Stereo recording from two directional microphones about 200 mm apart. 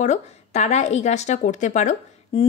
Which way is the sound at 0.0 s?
35° left (ahead or behind).